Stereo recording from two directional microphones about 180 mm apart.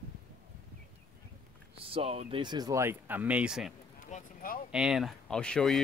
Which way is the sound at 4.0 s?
45° left (ahead or behind).